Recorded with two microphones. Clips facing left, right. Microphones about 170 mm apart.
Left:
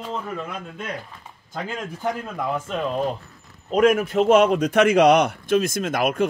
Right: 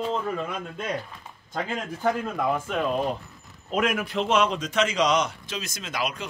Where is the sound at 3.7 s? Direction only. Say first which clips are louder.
Left 8 dB; 45° left (ahead or behind).